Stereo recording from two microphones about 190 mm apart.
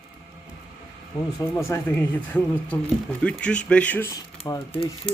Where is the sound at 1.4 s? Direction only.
15° left (ahead or behind).